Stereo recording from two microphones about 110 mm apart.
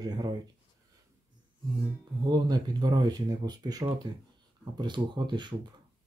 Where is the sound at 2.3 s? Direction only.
40° right (ahead or behind).